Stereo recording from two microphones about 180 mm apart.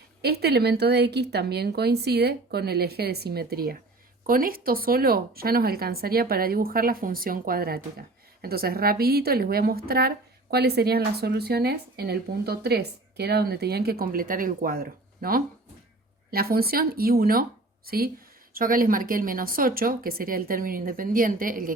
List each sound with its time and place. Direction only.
0.2 s a woman's voice: 65° right (ahead or behind)